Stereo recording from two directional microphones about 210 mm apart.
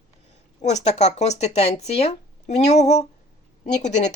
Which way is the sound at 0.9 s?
30° left (ahead or behind).